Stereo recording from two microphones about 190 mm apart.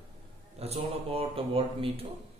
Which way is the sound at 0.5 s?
35° right (ahead or behind).